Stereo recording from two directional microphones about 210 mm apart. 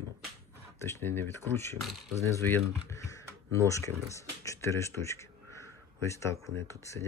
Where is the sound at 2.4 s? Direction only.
10° left (ahead or behind).